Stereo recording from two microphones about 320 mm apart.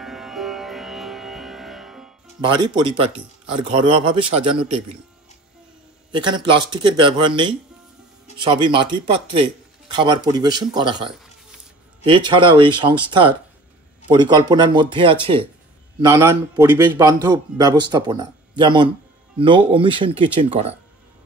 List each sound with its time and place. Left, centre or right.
0.0 s music: centre
2.4 s a man's voice: centre
6.1 s a man's voice: centre